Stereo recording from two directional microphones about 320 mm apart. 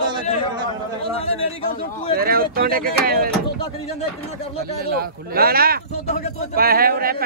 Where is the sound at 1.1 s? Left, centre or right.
Centre.